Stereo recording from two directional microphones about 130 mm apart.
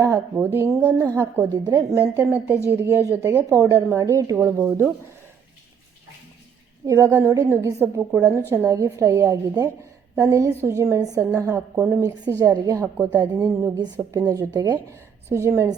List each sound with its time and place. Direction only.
0.0 s a woman's voice: 20° right (ahead or behind)
1.5 s a woman's voice: 30° right (ahead or behind)
6.8 s a woman's voice: 20° right (ahead or behind)
14.9 s a woman's voice: 20° right (ahead or behind)